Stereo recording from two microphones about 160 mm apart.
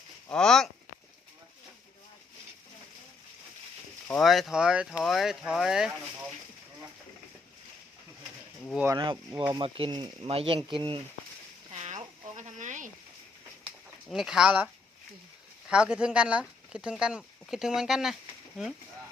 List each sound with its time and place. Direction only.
0.3 s speech: 5° left (ahead or behind)
4.1 s speech: centre (ahead or behind)
9.0 s speech: 30° right (ahead or behind)
11.7 s a sound: 40° right (ahead or behind)
14.1 s speech: 5° right (ahead or behind)
15.7 s speech: 5° right (ahead or behind)